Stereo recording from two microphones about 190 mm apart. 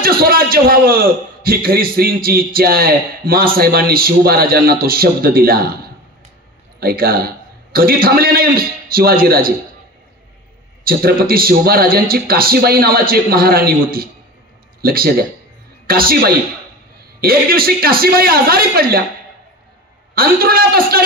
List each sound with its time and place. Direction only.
0.0 s a man's voice: 50° right (ahead or behind)
6.8 s a man's voice: 55° right (ahead or behind)
10.9 s a man's voice: 55° right (ahead or behind)
20.2 s a man's voice: 50° right (ahead or behind)